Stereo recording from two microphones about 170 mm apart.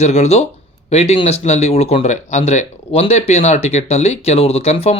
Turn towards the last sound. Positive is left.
turn(degrees=35)  # may be behind; listen again after turning